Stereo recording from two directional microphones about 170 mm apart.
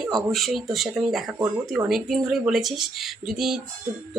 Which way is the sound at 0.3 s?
Centre (ahead or behind).